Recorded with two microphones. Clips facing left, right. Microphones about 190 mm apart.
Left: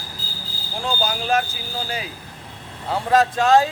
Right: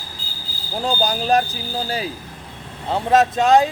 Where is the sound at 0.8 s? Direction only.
35° right (ahead or behind).